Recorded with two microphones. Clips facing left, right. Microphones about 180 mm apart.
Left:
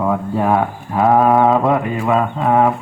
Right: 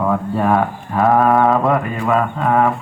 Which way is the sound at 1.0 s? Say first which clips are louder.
Left 1 dB; centre (ahead or behind).